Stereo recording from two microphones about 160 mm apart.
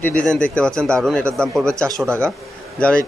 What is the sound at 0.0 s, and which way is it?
Speech, 10° left (ahead or behind).